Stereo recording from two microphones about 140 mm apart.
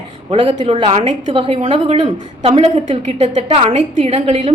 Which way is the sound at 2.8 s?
50° right (ahead or behind).